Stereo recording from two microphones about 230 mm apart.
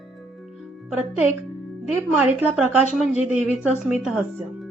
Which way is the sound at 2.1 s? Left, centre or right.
Centre.